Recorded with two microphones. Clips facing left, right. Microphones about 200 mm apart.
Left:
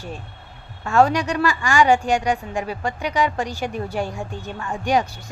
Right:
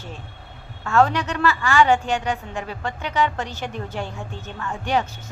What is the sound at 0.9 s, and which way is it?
A woman's voice, 15° left (ahead or behind).